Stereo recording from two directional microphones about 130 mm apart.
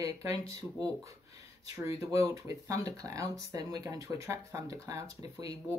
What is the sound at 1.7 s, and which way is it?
Speech, 25° right (ahead or behind).